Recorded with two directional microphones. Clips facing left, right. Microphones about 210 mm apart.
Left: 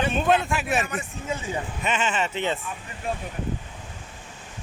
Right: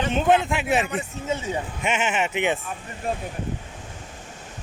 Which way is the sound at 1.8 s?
15° right (ahead or behind).